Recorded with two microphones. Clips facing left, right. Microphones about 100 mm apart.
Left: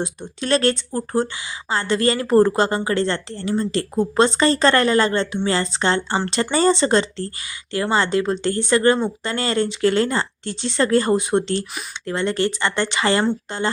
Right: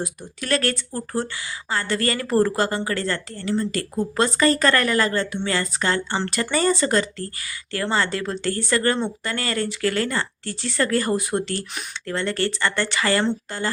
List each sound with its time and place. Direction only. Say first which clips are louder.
0.0 s a woman's voice: left 4 dB; 25° left (ahead or behind)